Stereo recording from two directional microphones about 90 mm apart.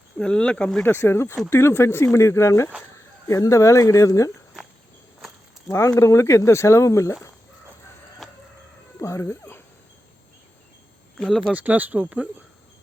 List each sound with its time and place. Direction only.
0.2 s speech: 10° left (ahead or behind)
0.8 s speech: 25° left (ahead or behind)
5.7 s speech: 35° left (ahead or behind)
9.0 s speech: 30° left (ahead or behind)
11.2 s speech: 5° left (ahead or behind)
11.5 s speech: 15° right (ahead or behind)